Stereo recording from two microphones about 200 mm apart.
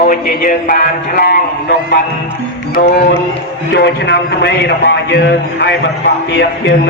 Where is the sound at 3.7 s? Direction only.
60° left (ahead or behind).